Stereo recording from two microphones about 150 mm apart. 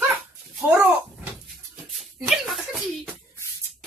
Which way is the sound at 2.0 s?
Centre (ahead or behind).